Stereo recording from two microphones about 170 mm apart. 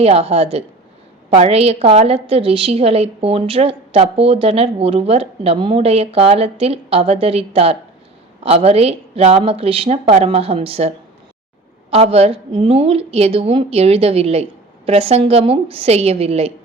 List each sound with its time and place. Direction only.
0.0 s a woman's voice: 35° right (ahead or behind)